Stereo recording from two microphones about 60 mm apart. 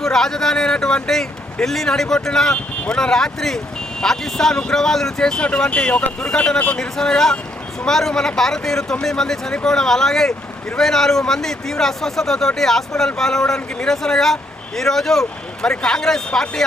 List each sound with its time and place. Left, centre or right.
0.0 s speech: centre